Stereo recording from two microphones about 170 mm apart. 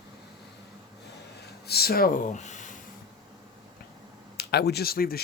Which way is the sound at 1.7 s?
65° left (ahead or behind).